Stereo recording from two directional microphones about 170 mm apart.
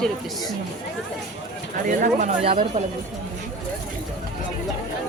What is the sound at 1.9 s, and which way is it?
Speech, 50° right (ahead or behind).